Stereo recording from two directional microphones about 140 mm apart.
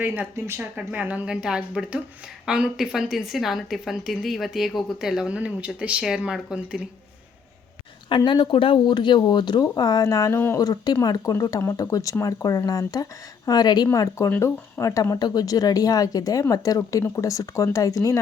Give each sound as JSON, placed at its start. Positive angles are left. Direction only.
{"t": 0.0, "sound": "a woman's voice", "side_deg": -10}
{"t": 8.1, "sound": "speech", "side_deg": 35}